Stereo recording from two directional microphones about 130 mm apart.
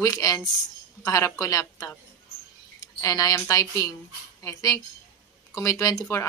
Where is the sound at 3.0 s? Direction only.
25° left (ahead or behind).